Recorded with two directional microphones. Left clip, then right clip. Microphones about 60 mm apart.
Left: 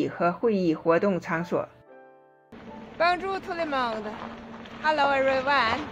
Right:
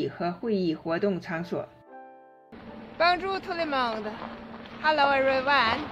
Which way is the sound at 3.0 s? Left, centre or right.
Right.